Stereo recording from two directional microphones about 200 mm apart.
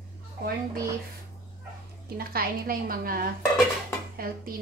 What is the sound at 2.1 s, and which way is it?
Speech, 50° right (ahead or behind).